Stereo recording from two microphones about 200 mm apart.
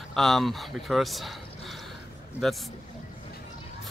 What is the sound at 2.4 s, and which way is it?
Speech, centre (ahead or behind).